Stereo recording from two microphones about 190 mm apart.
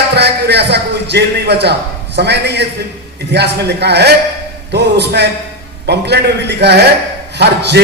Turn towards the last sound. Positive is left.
turn(degrees=-60)  # may be behind; listen again after turning